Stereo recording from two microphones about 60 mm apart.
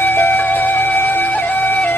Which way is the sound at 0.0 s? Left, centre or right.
Left.